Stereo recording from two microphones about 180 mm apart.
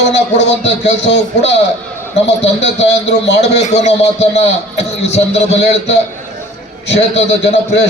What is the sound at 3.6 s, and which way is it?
Speech, 35° left (ahead or behind).